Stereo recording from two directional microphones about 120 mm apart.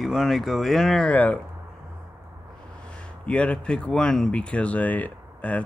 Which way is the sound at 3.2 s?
10° left (ahead or behind).